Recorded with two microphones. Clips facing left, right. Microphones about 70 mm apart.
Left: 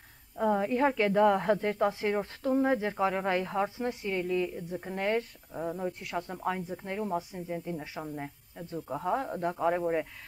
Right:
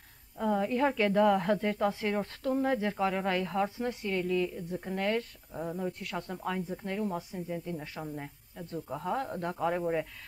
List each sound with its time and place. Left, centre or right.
0.4 s a woman's voice: centre